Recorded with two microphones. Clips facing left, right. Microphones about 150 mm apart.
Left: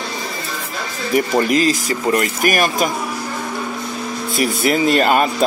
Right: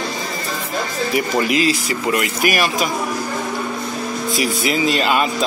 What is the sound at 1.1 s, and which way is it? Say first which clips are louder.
Speech: left 4 dB; 45° left (ahead or behind).